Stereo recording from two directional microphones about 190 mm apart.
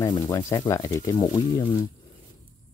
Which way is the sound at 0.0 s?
15° left (ahead or behind).